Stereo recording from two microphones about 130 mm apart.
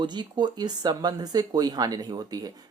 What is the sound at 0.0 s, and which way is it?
Speech, 35° right (ahead or behind).